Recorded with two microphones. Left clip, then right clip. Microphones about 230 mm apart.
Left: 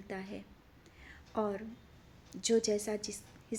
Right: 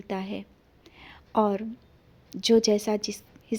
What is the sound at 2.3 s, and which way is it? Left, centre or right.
Speech, right.